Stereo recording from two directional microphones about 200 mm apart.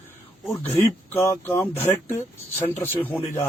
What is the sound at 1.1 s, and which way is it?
Speech, 10° left (ahead or behind).